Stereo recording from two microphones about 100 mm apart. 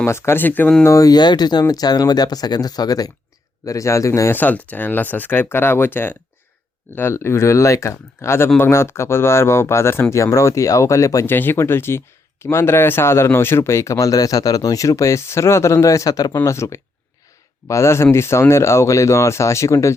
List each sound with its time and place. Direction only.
0.0 s speech: 25° left (ahead or behind)
0.9 s speech: 35° left (ahead or behind)
4.4 s speech: 15° left (ahead or behind); by 11.3 s 35° left (ahead or behind)
11.3 s speech: 20° left (ahead or behind)